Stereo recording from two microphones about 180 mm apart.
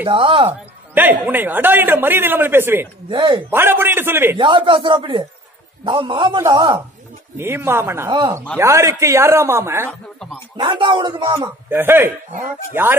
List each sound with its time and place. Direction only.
0.1 s speech: 30° right (ahead or behind)
0.5 s speech: 10° right (ahead or behind)
3.1 s speech: 25° right (ahead or behind)
3.4 s speech: 15° right (ahead or behind)
4.4 s speech: 30° right (ahead or behind)
7.3 s speech: 15° right (ahead or behind)
10.6 s speech: 25° right (ahead or behind); by 12.9 s 10° right (ahead or behind)